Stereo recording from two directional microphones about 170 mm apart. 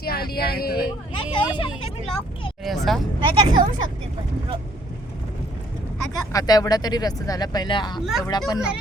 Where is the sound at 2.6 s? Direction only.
Centre (ahead or behind).